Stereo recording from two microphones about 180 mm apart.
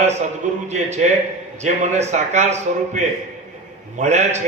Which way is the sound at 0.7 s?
40° right (ahead or behind).